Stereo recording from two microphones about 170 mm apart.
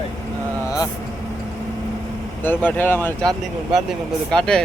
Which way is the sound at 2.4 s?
10° left (ahead or behind).